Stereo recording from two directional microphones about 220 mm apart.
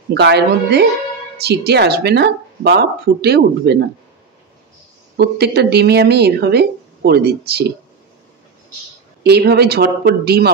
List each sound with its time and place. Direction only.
0.1 s speech: 50° right (ahead or behind)
5.1 s speech: 45° right (ahead or behind)
9.2 s speech: 45° right (ahead or behind)